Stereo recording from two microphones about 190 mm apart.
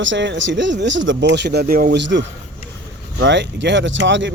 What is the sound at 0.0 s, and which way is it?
Speech, 75° right (ahead or behind).